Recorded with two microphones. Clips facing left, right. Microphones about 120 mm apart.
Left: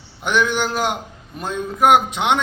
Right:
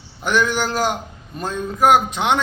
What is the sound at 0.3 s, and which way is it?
A man's voice, 20° left (ahead or behind).